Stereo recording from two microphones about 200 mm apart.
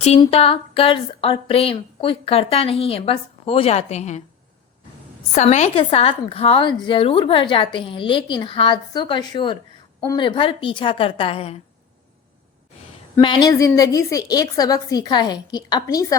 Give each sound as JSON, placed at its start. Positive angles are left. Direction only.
{"t": 0.0, "sound": "a woman's voice", "side_deg": 30}
{"t": 5.3, "sound": "a woman's voice", "side_deg": 35}
{"t": 13.2, "sound": "a woman's voice", "side_deg": 20}